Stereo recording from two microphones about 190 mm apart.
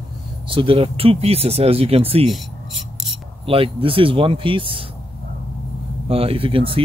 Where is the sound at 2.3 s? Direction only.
Centre (ahead or behind).